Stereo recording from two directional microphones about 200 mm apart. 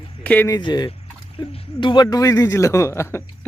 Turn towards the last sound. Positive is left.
turn(degrees=15)  # may be behind; listen again after turning